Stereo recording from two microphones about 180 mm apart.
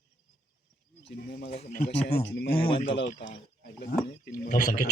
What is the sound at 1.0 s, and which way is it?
Speech, 65° left (ahead or behind).